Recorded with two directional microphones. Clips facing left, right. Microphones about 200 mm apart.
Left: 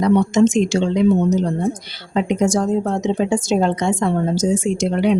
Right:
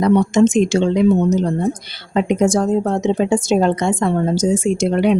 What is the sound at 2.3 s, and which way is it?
Speech, 55° right (ahead or behind).